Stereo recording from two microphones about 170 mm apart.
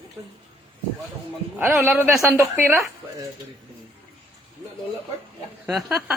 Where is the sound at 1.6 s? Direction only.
5° right (ahead or behind).